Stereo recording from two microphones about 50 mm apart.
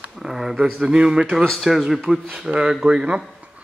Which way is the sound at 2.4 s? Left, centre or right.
Centre.